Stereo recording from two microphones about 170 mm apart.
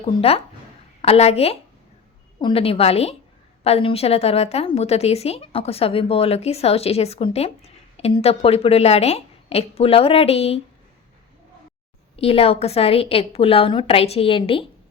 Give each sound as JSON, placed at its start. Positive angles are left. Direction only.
{"t": 0.0, "sound": "a woman's voice", "side_deg": 35}
{"t": 12.1, "sound": "a woman's voice", "side_deg": 35}